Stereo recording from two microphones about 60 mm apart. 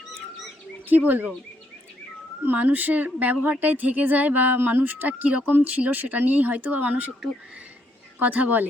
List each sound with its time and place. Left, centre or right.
0.9 s speech: right
2.4 s speech: right
8.2 s speech: right